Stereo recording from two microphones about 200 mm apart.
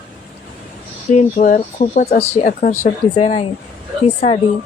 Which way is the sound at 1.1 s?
40° left (ahead or behind).